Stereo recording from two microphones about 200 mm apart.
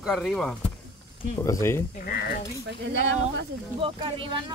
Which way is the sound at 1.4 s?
15° left (ahead or behind).